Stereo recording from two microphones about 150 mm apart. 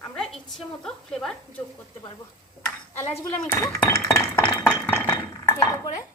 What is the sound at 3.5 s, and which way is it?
Chink, 20° left (ahead or behind).